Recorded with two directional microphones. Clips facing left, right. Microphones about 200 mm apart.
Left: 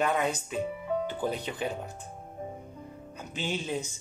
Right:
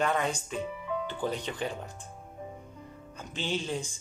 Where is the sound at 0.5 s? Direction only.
45° left (ahead or behind).